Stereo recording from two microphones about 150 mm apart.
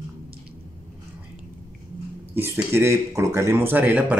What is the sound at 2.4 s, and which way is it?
Speech, 15° right (ahead or behind).